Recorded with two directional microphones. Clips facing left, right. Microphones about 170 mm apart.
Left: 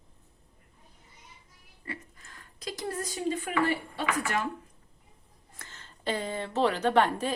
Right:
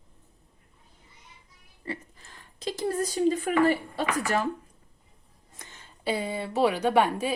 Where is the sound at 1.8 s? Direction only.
30° right (ahead or behind).